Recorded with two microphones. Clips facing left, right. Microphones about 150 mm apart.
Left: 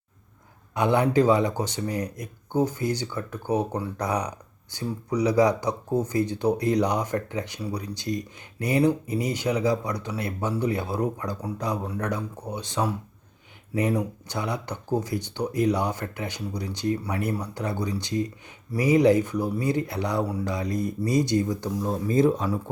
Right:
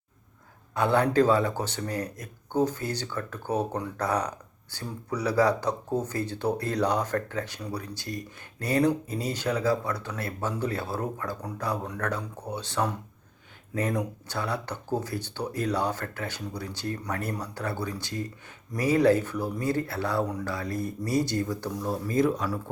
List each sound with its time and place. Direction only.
0.7 s speech: 15° left (ahead or behind)